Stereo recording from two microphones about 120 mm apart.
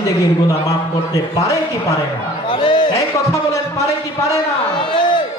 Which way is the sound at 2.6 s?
45° left (ahead or behind).